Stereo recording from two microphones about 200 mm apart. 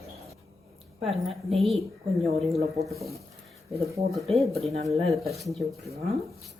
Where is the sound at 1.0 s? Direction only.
Centre (ahead or behind).